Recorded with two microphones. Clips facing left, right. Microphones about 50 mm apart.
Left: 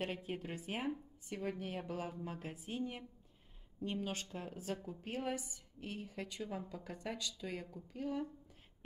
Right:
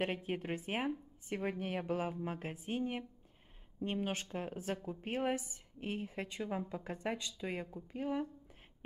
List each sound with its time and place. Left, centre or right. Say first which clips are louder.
0.0 s a woman's voice: right 4 dB; right